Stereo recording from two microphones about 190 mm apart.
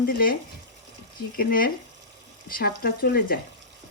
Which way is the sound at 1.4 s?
50° left (ahead or behind).